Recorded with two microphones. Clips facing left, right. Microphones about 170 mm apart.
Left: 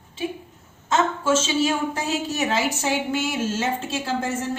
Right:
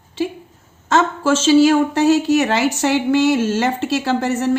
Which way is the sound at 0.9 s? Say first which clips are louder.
Right 5 dB; 75° right (ahead or behind).